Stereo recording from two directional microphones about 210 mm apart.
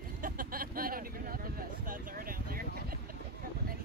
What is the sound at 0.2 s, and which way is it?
Vehicle, 40° right (ahead or behind).